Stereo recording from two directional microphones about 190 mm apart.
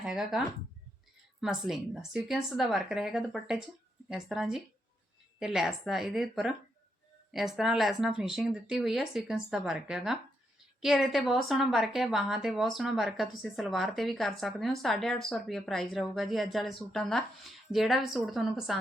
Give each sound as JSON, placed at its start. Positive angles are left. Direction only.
{"t": 0.0, "sound": "a woman's voice", "side_deg": 0}